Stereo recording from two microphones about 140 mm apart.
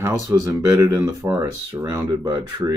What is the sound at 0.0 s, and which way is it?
Speech, 20° right (ahead or behind).